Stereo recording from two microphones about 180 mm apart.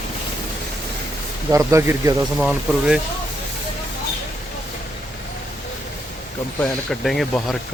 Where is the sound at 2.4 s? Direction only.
5° right (ahead or behind).